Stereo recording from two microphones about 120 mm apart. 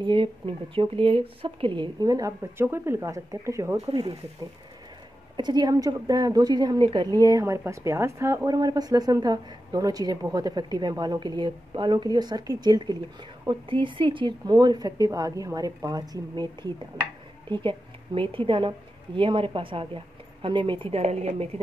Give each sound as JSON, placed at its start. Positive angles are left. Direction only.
{"t": 0.0, "sound": "a woman's voice", "side_deg": -45}
{"t": 5.4, "sound": "a woman's voice", "side_deg": -35}
{"t": 21.0, "sound": "a woman's voice", "side_deg": -65}